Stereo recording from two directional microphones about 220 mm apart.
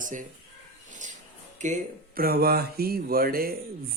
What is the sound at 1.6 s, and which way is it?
Speech, 35° right (ahead or behind).